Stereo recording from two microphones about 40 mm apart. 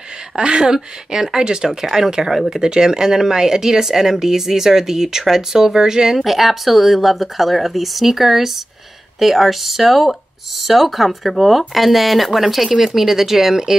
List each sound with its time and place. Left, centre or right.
0.4 s speech: right